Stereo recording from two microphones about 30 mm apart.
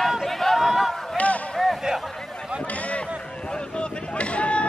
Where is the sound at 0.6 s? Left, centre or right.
Centre.